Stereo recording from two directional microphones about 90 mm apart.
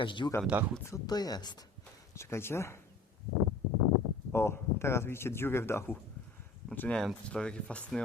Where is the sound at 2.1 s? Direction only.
30° left (ahead or behind).